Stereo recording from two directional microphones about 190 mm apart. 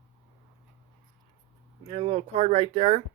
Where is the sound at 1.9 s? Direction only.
30° right (ahead or behind).